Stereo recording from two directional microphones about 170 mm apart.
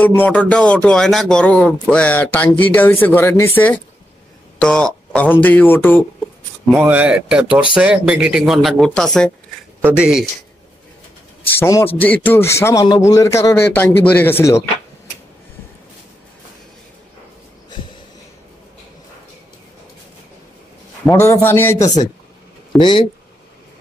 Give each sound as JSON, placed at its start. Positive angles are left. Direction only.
{"t": 0.0, "sound": "a man's voice", "side_deg": 10}
{"t": 6.7, "sound": "speech", "side_deg": -10}
{"t": 11.6, "sound": "a man's voice", "side_deg": 15}
{"t": 21.1, "sound": "a man's voice", "side_deg": 15}
{"t": 22.8, "sound": "speech", "side_deg": 25}